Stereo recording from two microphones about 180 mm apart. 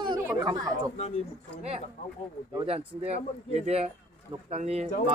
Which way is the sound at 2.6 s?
35° right (ahead or behind).